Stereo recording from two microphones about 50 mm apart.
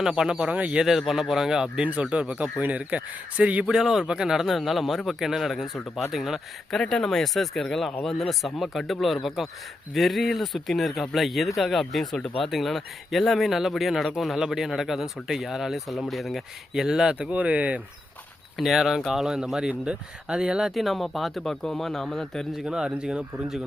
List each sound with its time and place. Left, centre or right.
0.0 s speech: centre
0.9 s speech: centre
1.8 s speech: right
3.7 s speech: centre
6.7 s speech: centre
17.3 s speech: right
18.5 s speech: centre
20.7 s speech: centre
21.5 s speech: centre
22.6 s speech: centre